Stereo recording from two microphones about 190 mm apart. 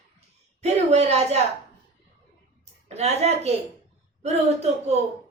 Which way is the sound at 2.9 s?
35° right (ahead or behind).